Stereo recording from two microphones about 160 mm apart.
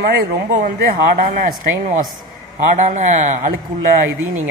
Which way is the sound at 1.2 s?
60° right (ahead or behind).